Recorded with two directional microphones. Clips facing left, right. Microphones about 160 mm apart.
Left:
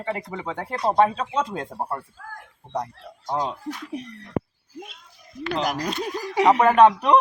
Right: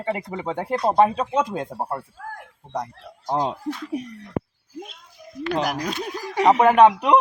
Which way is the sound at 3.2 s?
30° right (ahead or behind).